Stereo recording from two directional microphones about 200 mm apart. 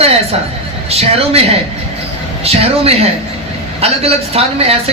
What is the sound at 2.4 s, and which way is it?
A man's voice, 30° right (ahead or behind).